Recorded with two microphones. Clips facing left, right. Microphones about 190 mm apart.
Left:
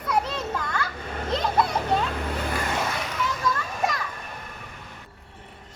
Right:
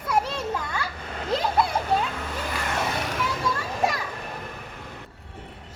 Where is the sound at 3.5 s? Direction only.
30° right (ahead or behind).